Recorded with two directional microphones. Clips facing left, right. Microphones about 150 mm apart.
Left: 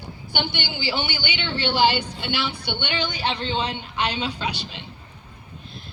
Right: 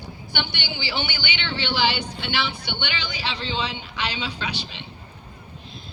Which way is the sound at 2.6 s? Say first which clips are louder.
Left 4 dB; 55° left (ahead or behind).